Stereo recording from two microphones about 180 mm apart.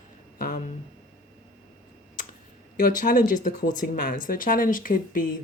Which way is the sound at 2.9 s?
50° left (ahead or behind).